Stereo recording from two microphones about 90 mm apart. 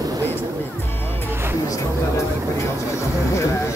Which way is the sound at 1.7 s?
35° left (ahead or behind).